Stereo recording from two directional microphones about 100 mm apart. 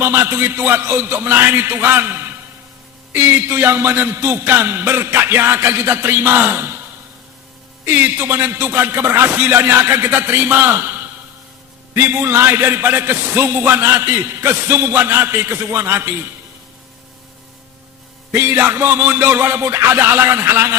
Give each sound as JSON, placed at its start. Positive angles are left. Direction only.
{"t": 0.0, "sound": "a man's voice", "side_deg": -25}
{"t": 7.9, "sound": "a man's voice", "side_deg": -20}
{"t": 18.3, "sound": "a man's voice", "side_deg": -25}